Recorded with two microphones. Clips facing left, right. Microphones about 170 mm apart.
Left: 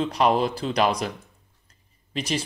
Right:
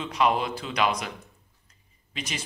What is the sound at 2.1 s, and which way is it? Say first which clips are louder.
Speech: left 8 dB; 35° left (ahead or behind).